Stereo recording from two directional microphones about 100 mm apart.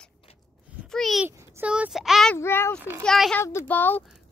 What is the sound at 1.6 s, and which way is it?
Speech, 15° right (ahead or behind).